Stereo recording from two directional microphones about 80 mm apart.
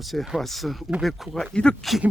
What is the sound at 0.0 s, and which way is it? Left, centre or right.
Speech, centre.